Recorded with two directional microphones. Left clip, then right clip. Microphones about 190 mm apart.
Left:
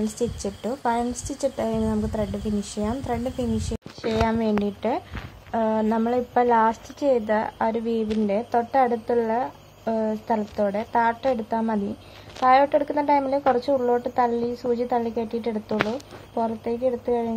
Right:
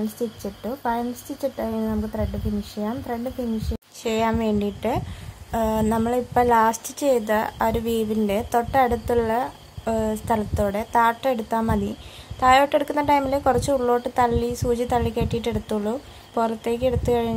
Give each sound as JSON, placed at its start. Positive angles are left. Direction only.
{"t": 0.4, "sound": "a woman's voice", "side_deg": 5}
{"t": 4.0, "sound": "a woman's voice", "side_deg": -5}